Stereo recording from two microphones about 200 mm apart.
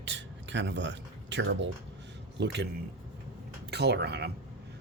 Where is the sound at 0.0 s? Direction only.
65° right (ahead or behind).